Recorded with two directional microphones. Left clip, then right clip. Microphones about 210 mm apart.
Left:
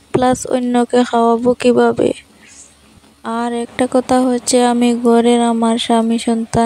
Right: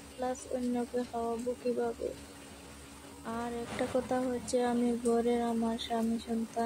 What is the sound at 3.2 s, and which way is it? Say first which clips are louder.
A woman's voice: left 18 dB; 50° left (ahead or behind).